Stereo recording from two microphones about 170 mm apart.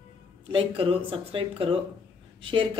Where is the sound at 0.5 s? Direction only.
35° right (ahead or behind).